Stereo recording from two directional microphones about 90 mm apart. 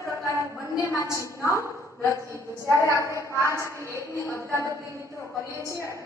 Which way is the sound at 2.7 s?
35° left (ahead or behind).